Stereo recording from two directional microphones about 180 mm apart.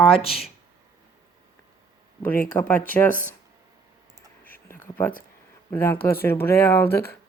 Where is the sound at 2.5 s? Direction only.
10° left (ahead or behind).